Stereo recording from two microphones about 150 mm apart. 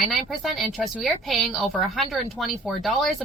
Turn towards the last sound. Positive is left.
turn(degrees=0)  # may be behind; listen again after turning